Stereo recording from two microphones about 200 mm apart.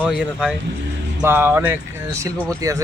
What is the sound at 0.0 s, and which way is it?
Speech, 5° right (ahead or behind).